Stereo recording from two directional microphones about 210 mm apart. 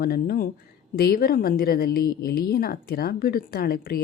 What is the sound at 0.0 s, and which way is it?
Speech, 45° left (ahead or behind).